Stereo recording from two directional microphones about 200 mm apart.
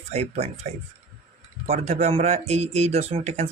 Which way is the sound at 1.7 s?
35° right (ahead or behind).